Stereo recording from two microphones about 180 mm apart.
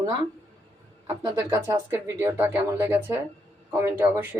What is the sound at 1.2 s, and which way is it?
Speech, 15° right (ahead or behind).